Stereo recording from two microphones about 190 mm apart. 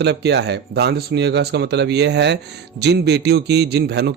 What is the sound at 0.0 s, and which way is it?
Speech, 60° right (ahead or behind).